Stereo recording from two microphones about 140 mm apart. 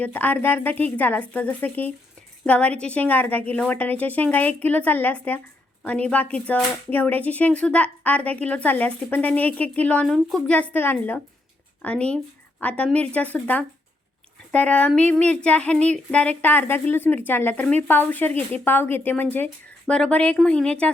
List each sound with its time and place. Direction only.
0.0 s a woman's voice: 10° left (ahead or behind)